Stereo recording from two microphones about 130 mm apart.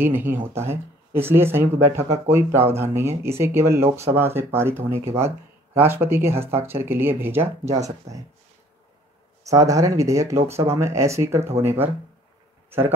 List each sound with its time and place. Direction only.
0.0 s speech: 15° right (ahead or behind)
8.1 s speech: 60° right (ahead or behind)
9.4 s speech: 25° right (ahead or behind)